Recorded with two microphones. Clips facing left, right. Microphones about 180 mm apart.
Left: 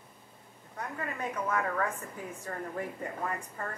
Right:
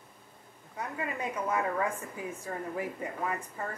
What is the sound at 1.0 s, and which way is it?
A woman's voice, 15° right (ahead or behind).